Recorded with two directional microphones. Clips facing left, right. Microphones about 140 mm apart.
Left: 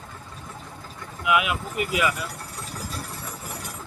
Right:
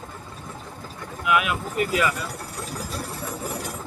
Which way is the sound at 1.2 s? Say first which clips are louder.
Even; 20° left (ahead or behind).